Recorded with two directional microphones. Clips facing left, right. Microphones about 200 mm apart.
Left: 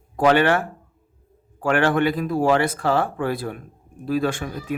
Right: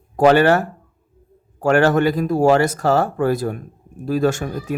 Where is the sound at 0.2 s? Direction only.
40° right (ahead or behind).